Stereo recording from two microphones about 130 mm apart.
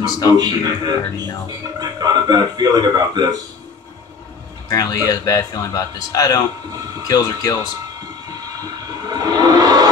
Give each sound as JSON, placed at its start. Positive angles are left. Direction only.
{"t": 0.4, "sound": "speech", "side_deg": -30}
{"t": 4.6, "sound": "speech", "side_deg": 30}
{"t": 9.1, "sound": "a sound", "side_deg": -30}